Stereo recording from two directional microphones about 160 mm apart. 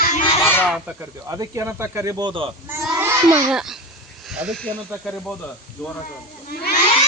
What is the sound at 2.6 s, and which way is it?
Goat, 15° right (ahead or behind).